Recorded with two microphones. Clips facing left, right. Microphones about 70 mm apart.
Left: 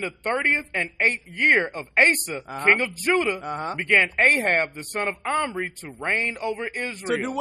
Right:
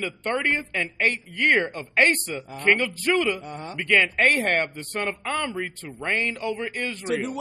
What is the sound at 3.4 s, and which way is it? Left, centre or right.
Speech, left.